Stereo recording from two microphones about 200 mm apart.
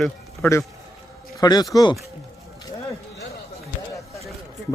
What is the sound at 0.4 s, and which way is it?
A man's voice, 10° left (ahead or behind).